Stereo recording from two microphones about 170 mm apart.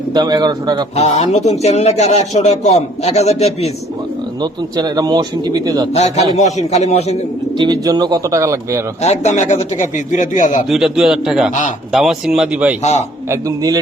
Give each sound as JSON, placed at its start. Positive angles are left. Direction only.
{"t": 0.1, "sound": "a man's voice", "side_deg": -25}
{"t": 0.9, "sound": "speech", "side_deg": 40}
{"t": 4.8, "sound": "a man's voice", "side_deg": -25}
{"t": 5.9, "sound": "speech", "side_deg": 40}
{"t": 7.6, "sound": "a man's voice", "side_deg": -25}
{"t": 9.0, "sound": "a man's voice", "side_deg": 40}
{"t": 10.7, "sound": "a man's voice", "side_deg": 0}
{"t": 12.8, "sound": "speech", "side_deg": 40}
{"t": 13.3, "sound": "a man's voice", "side_deg": -20}